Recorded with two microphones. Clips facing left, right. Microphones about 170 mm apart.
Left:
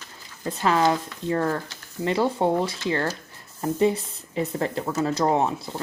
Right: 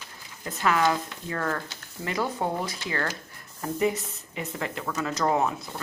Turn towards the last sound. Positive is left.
turn(degrees=30)  # may be behind; listen again after turning